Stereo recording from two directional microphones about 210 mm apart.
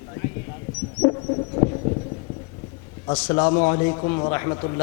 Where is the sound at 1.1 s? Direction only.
30° left (ahead or behind).